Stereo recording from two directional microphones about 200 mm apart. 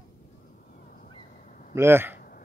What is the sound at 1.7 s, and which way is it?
Speech, 10° right (ahead or behind).